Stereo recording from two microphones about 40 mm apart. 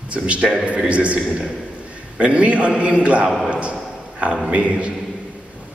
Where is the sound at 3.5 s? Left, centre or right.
Right.